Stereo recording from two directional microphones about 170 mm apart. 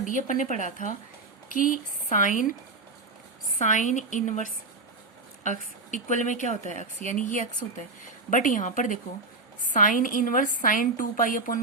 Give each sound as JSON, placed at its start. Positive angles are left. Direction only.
{"t": 0.0, "sound": "a woman's voice", "side_deg": 50}
{"t": 3.6, "sound": "a woman's voice", "side_deg": 45}